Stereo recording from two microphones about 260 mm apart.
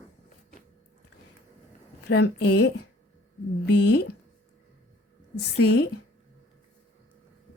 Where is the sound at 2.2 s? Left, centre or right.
Left.